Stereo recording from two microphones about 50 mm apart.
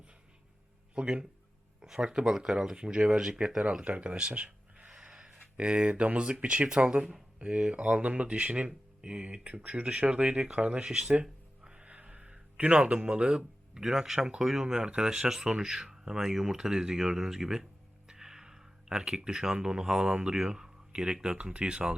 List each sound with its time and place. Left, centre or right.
0.9 s speech: right
10.8 s speech: centre